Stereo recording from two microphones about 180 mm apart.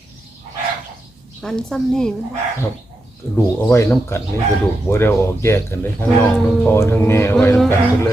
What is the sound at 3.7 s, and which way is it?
Speech, 15° left (ahead or behind).